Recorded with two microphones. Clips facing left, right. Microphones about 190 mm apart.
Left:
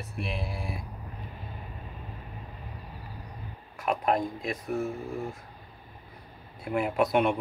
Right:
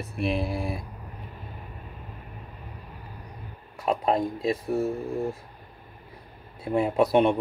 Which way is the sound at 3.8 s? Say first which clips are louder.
Right 3 dB; 25° right (ahead or behind).